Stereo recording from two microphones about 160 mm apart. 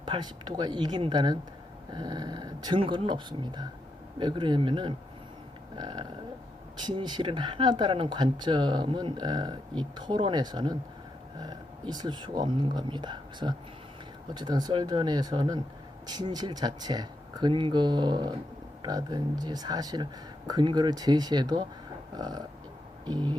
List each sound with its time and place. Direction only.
0.0 s speech: 25° right (ahead or behind)